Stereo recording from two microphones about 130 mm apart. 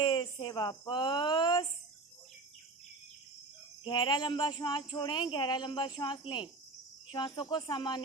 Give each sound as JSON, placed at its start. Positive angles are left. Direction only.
{"t": 0.0, "sound": "speech", "side_deg": 35}
{"t": 3.8, "sound": "speech", "side_deg": 35}